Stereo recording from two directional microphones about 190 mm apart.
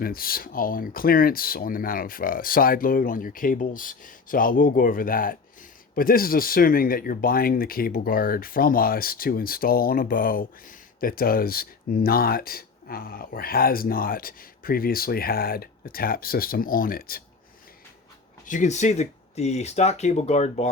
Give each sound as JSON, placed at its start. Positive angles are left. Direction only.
{"t": 0.0, "sound": "speech", "side_deg": 50}
{"t": 18.4, "sound": "speech", "side_deg": 40}